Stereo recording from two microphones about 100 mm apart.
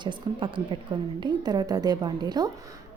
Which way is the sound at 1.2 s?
45° right (ahead or behind).